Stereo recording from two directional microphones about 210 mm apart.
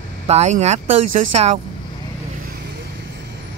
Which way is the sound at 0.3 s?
30° right (ahead or behind).